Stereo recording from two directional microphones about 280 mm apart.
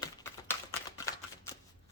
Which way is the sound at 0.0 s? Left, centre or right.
Centre.